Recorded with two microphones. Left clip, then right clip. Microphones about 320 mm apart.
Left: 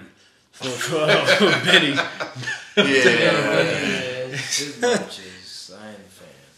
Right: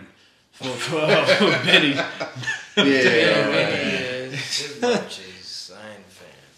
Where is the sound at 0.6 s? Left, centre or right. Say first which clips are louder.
Left 1 dB; left.